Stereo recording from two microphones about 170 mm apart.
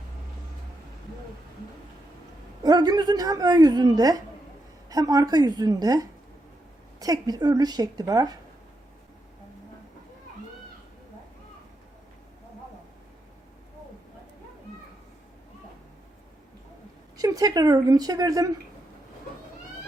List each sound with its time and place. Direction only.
2.6 s a woman's voice: 25° right (ahead or behind)
17.2 s a woman's voice: 20° right (ahead or behind)